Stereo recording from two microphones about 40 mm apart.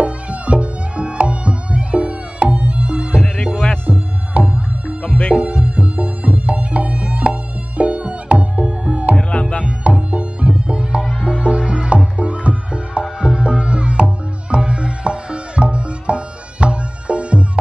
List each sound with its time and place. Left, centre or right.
0.0 s music: right
4.3 s music: right
9.3 s music: left
9.8 s music: right